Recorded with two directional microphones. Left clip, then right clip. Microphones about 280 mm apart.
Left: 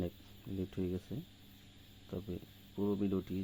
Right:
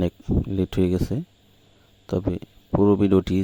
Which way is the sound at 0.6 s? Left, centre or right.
Right.